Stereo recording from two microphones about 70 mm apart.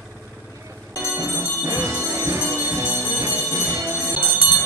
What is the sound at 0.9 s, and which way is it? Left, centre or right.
Music, right.